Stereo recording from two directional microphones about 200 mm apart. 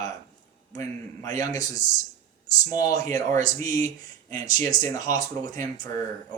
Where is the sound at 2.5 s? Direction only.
20° left (ahead or behind).